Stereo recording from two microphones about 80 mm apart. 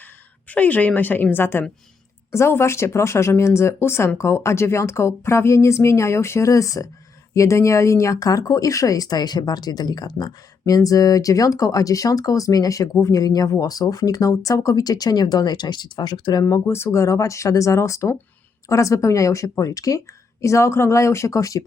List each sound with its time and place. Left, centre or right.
0.0 s a woman's voice: centre; by 16.4 s left
16.4 s speech: left